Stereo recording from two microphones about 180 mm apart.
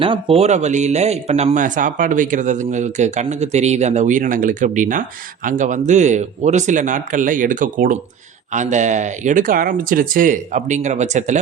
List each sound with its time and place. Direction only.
0.0 s speech: 30° right (ahead or behind)